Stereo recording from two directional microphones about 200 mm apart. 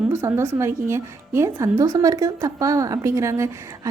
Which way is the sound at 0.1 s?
10° right (ahead or behind).